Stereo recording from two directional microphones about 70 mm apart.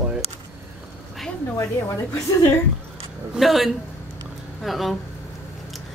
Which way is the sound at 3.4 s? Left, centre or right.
Centre.